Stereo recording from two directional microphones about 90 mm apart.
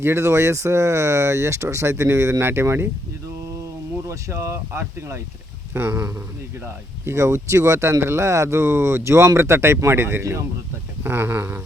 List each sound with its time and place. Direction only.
0.0 s speech: 30° right (ahead or behind)
4.0 s speech: 30° right (ahead or behind)